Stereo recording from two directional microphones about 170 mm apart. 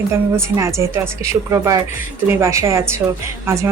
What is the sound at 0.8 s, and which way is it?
Speech, 15° right (ahead or behind).